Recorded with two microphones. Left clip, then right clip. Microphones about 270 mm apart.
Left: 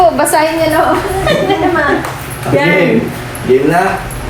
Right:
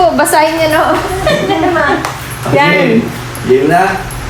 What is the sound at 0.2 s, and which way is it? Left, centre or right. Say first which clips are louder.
Speech: right 2 dB; right.